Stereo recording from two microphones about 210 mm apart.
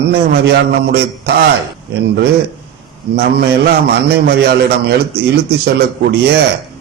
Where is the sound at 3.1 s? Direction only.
50° right (ahead or behind).